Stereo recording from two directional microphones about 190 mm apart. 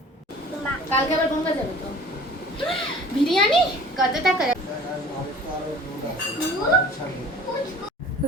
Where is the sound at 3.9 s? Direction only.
Centre (ahead or behind).